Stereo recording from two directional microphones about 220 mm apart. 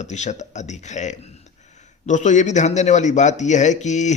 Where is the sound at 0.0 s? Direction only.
30° left (ahead or behind).